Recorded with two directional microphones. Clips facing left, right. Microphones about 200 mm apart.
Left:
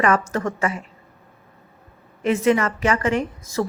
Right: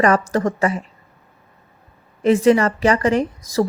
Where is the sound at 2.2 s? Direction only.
35° right (ahead or behind).